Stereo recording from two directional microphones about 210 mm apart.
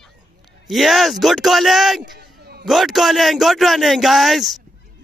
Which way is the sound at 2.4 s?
50° right (ahead or behind).